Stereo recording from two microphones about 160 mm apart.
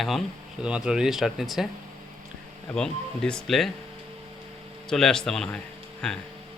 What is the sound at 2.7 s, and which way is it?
Speech, 5° left (ahead or behind).